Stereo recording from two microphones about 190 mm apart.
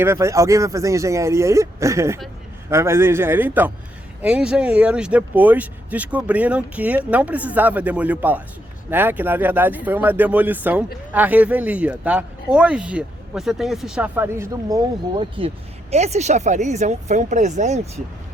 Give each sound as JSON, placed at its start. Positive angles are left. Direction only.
{"t": 0.0, "sound": "speech", "side_deg": -15}